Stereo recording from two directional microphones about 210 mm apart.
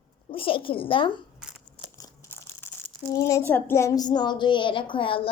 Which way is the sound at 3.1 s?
15° left (ahead or behind).